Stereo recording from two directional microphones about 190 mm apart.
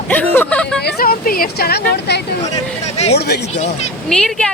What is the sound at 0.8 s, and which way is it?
Speech, 55° left (ahead or behind).